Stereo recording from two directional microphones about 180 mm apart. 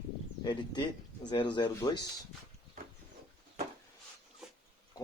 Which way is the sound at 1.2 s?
25° left (ahead or behind).